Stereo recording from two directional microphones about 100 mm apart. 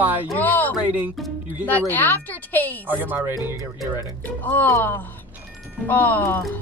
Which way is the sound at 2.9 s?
20° right (ahead or behind).